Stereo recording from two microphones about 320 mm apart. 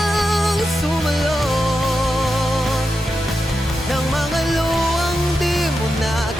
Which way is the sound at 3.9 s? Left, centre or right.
Centre.